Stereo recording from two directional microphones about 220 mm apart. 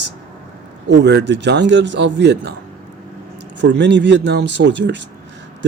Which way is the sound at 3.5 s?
55° right (ahead or behind).